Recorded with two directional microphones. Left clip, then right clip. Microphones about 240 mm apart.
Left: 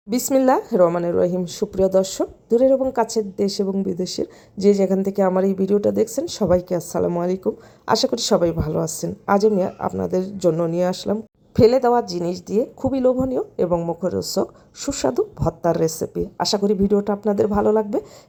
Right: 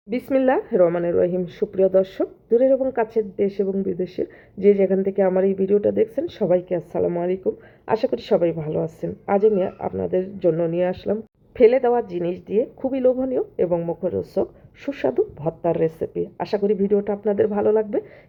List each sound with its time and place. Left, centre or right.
0.1 s a woman's voice: left